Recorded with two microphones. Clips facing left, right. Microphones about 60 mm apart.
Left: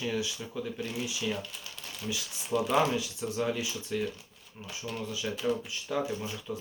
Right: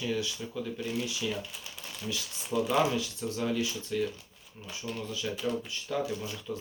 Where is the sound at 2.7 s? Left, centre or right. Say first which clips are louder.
Even; centre.